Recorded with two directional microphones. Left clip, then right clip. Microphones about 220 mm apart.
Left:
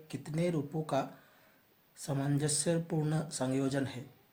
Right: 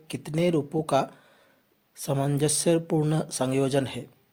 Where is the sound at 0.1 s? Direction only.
35° right (ahead or behind).